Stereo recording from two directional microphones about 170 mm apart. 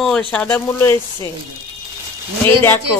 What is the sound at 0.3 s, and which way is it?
Speech, 10° left (ahead or behind).